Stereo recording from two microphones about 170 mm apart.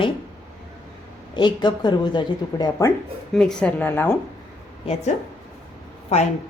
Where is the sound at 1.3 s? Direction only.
25° left (ahead or behind).